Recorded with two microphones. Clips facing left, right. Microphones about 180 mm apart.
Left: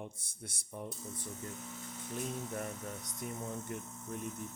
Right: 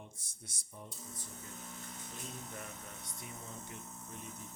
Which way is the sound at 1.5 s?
5° left (ahead or behind).